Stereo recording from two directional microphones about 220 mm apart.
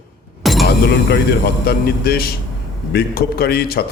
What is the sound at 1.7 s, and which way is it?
A man's voice, 45° left (ahead or behind).